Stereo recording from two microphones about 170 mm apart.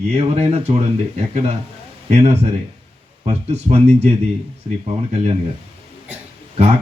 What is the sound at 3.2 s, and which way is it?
Speech, 40° right (ahead or behind).